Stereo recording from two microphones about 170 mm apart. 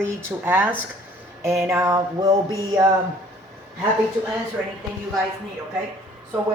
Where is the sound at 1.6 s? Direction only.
15° right (ahead or behind).